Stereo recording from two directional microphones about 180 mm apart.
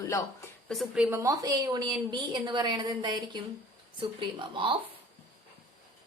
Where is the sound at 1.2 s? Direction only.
20° right (ahead or behind).